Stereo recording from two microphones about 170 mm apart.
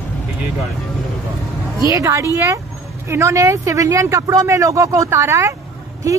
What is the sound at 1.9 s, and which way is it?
Speech, 15° right (ahead or behind).